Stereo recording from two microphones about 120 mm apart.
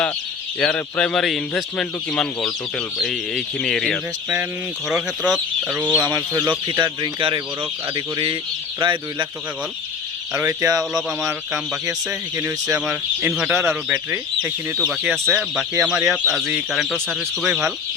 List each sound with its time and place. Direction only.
0.6 s speech: 10° left (ahead or behind)
4.9 s speech: 5° right (ahead or behind)
6.0 s speech: 30° right (ahead or behind)
10.3 s speech: 25° right (ahead or behind)
12.4 s speech: 20° right (ahead or behind)
12.8 s speech: 10° right (ahead or behind)
15.1 s speech: 5° left (ahead or behind)
15.8 s speech: 10° right (ahead or behind)